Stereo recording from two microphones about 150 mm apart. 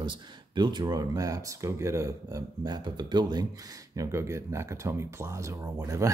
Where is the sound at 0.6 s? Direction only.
30° right (ahead or behind).